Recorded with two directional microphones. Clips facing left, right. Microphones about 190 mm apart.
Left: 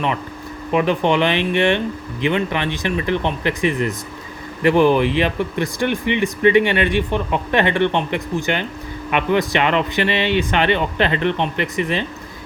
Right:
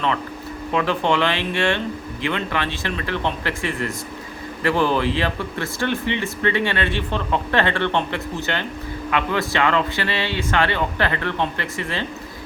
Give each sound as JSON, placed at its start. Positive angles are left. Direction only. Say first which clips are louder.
{"t": 0.7, "sound": "speech", "louder": "left 4 dB", "side_deg": 15}